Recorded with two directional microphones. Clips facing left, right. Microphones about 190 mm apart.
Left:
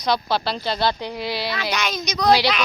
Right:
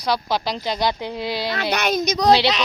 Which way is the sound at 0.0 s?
10° right (ahead or behind).